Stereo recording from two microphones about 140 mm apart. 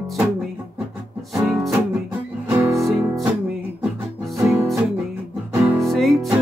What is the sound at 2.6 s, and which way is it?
Music, 20° right (ahead or behind).